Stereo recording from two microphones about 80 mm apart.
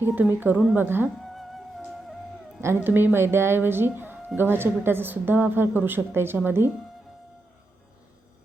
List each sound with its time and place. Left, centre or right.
0.2 s a woman's voice: right
1.2 s music: centre
2.7 s a woman's voice: right